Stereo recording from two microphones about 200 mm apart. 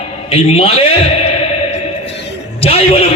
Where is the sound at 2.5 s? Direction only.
30° left (ahead or behind).